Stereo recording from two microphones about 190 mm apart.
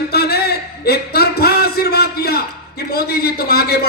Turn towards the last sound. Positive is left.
turn(degrees=55)  # may be behind; listen again after turning